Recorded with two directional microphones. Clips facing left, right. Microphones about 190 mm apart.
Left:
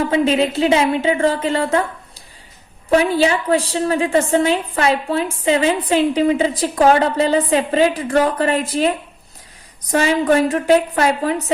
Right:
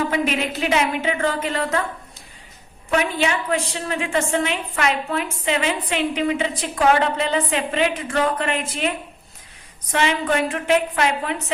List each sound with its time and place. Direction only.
0.1 s a woman's voice: 30° left (ahead or behind)
9.9 s a woman's voice: 40° left (ahead or behind)